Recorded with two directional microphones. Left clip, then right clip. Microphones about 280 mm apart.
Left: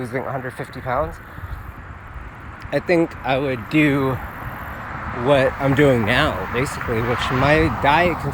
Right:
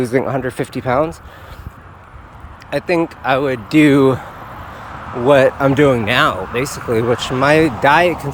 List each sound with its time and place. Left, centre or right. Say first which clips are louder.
0.0 s speech: right 8 dB; right
2.6 s speech: right 2 dB; centre; by 4.2 s right
5.3 s speech: right 6 dB; centre
6.7 s speech: right 6 dB; right
7.3 s speech: right 4 dB; centre